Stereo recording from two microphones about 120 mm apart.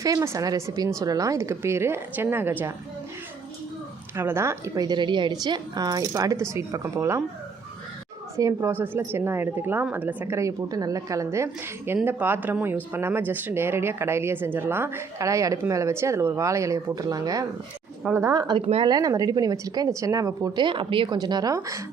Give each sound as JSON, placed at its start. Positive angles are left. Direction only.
{"t": 0.0, "sound": "speech", "side_deg": -30}
{"t": 4.1, "sound": "speech", "side_deg": -20}
{"t": 8.4, "sound": "speech", "side_deg": -30}
{"t": 8.7, "sound": "a woman's voice", "side_deg": -15}
{"t": 18.3, "sound": "speech", "side_deg": -35}
{"t": 18.6, "sound": "speech", "side_deg": -55}
{"t": 18.9, "sound": "speech", "side_deg": -30}
{"t": 20.7, "sound": "speech", "side_deg": -45}